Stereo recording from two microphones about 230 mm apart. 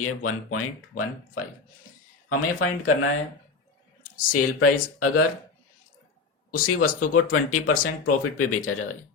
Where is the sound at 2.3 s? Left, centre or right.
Left.